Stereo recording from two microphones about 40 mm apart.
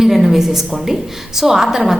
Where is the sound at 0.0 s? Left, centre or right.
Centre.